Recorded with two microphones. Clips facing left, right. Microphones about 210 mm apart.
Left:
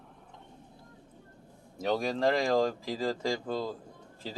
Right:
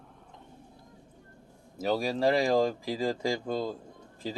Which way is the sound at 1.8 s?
5° right (ahead or behind).